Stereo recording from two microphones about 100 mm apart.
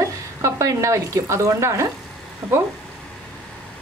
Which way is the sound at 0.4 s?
30° right (ahead or behind).